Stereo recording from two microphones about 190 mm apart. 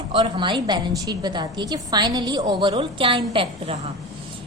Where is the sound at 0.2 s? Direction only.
25° right (ahead or behind).